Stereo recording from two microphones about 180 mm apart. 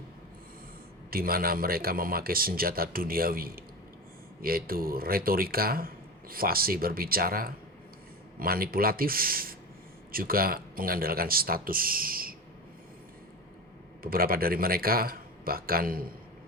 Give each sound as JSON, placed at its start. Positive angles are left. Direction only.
{"t": 1.1, "sound": "speech", "side_deg": -55}
{"t": 14.0, "sound": "speech", "side_deg": -55}